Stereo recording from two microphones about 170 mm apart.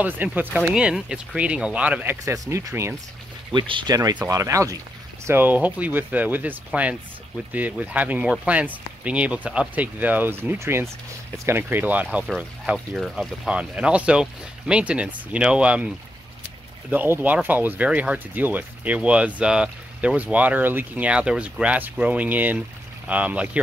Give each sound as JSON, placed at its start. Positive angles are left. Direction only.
{"t": 0.0, "sound": "speech", "side_deg": -10}
{"t": 3.5, "sound": "speech", "side_deg": -30}
{"t": 16.9, "sound": "speech", "side_deg": -10}